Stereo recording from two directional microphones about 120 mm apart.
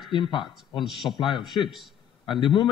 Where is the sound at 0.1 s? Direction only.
40° left (ahead or behind).